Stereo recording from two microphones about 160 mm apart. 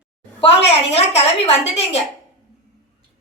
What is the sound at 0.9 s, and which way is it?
A woman's voice, 40° left (ahead or behind).